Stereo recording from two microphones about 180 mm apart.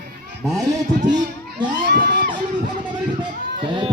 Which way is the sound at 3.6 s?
25° right (ahead or behind).